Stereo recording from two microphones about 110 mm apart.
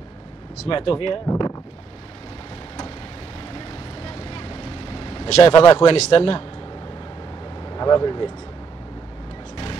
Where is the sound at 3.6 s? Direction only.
60° left (ahead or behind).